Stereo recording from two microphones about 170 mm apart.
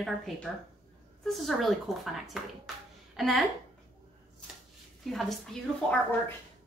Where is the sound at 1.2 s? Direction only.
Centre (ahead or behind).